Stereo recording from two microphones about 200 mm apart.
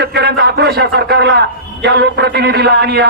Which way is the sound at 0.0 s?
55° right (ahead or behind).